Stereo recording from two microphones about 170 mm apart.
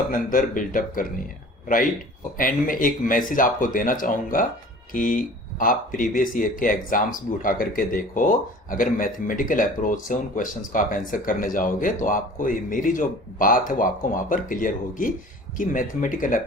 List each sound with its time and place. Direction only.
0.1 s a man's voice: 55° left (ahead or behind)